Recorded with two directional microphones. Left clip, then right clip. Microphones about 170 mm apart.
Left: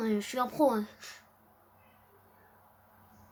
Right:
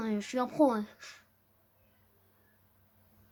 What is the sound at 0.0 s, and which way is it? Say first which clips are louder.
Speech: left 2 dB; 40° right (ahead or behind).